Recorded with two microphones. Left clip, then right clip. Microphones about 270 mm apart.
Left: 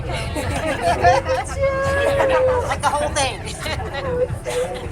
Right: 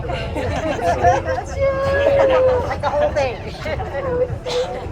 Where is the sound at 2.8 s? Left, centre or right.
Centre.